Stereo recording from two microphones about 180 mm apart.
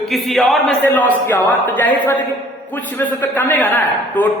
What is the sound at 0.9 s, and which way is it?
Speech, 15° left (ahead or behind).